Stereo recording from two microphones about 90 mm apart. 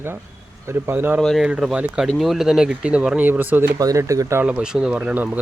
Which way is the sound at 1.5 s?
10° right (ahead or behind).